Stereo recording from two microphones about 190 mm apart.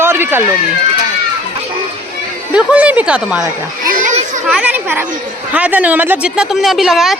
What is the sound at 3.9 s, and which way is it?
Children playing, 40° right (ahead or behind).